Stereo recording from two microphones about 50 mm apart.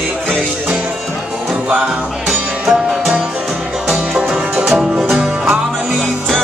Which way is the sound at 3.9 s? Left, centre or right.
Centre.